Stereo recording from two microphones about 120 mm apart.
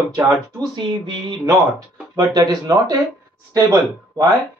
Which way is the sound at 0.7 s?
40° right (ahead or behind).